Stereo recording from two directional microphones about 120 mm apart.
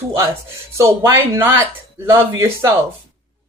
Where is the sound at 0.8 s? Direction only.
25° right (ahead or behind).